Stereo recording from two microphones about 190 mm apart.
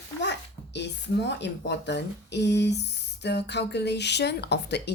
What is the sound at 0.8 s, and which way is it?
Speech, 65° left (ahead or behind).